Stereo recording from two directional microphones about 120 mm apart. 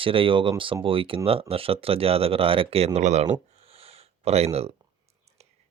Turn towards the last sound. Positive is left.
turn(degrees=-60)  # may be behind; listen again after turning